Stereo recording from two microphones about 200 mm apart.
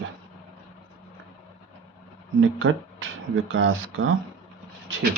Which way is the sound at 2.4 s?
70° right (ahead or behind).